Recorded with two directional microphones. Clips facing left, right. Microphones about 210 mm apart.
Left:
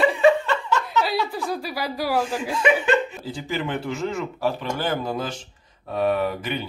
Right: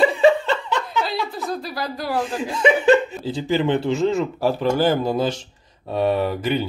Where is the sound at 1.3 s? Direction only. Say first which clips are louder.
Even; 10° left (ahead or behind).